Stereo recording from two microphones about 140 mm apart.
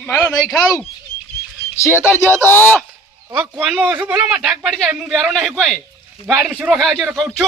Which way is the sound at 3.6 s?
5° right (ahead or behind).